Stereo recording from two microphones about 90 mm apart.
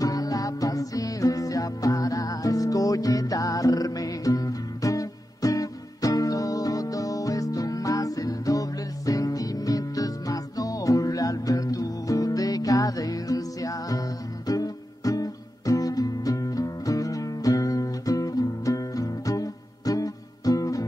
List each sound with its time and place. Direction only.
0.0 s music: 45° left (ahead or behind)